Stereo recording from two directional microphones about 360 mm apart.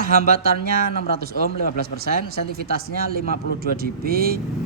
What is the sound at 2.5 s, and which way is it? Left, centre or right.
Speech, right.